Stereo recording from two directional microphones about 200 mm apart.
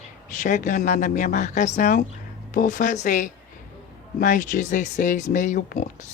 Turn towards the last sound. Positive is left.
turn(degrees=40)  # may be behind; listen again after turning